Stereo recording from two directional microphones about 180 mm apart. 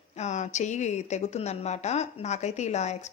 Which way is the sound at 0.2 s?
40° left (ahead or behind).